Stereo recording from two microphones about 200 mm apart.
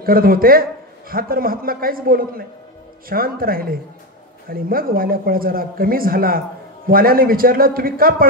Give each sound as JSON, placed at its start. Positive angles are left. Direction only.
{"t": 0.0, "sound": "a man's voice", "side_deg": -45}